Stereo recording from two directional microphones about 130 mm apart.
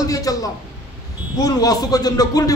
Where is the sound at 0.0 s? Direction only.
25° left (ahead or behind).